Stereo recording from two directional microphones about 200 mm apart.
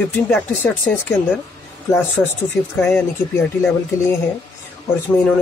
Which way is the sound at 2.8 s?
5° left (ahead or behind).